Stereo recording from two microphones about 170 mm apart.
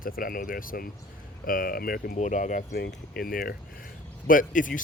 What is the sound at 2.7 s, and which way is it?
Speech, 70° left (ahead or behind).